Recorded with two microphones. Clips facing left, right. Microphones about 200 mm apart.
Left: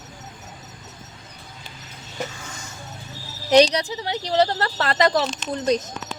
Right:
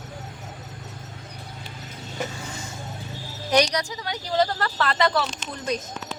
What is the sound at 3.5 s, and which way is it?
Speech, 30° left (ahead or behind).